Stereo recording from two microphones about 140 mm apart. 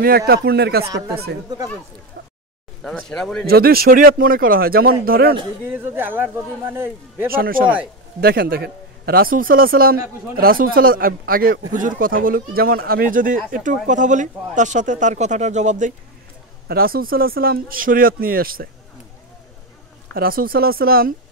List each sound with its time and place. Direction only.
0.7 s a man's voice: 90° right
2.8 s speech: 5° left (ahead or behind)
3.4 s a man's voice: 90° right
5.7 s speech: 15° right (ahead or behind)
7.2 s a man's voice: 90° right
7.6 s speech: 10° right (ahead or behind)
8.2 s a man's voice: 90° right
13.8 s speech: 60° right (ahead or behind)
16.6 s a man's voice: 90° right
20.2 s a man's voice: 90° right